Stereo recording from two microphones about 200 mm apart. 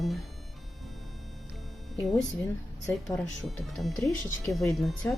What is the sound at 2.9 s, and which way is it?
Speech, 5° left (ahead or behind).